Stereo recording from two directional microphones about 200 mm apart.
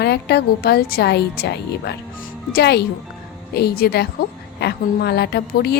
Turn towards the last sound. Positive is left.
turn(degrees=55)  # may be behind; listen again after turning